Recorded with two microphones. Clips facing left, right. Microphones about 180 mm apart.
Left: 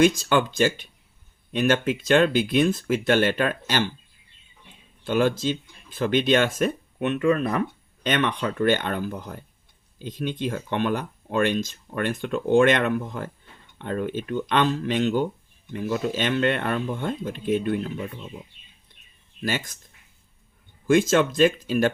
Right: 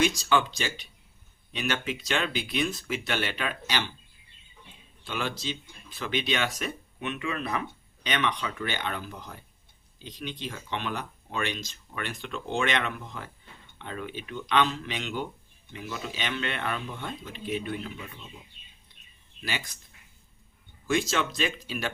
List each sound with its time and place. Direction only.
0.0 s speech: 50° left (ahead or behind)
5.0 s speech: 50° left (ahead or behind)
19.4 s speech: 45° left (ahead or behind)
20.8 s speech: 50° left (ahead or behind)